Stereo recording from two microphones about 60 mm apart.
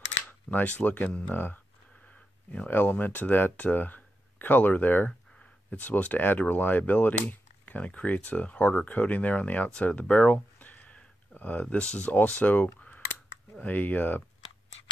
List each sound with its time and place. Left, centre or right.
0.5 s speech: left
2.7 s speech: left